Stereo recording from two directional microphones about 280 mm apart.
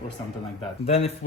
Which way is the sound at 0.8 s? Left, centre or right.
Left.